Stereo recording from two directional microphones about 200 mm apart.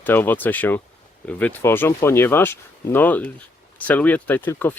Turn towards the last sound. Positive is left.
turn(degrees=10)  # may be behind; listen again after turning